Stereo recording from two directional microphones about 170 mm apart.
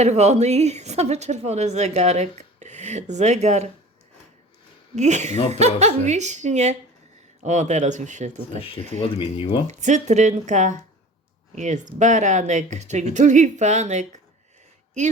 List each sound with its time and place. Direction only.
0.0 s speech: 40° right (ahead or behind)
4.9 s a woman's voice: 45° right (ahead or behind)
8.5 s speech: 30° left (ahead or behind)
9.6 s a woman's voice: 45° right (ahead or behind)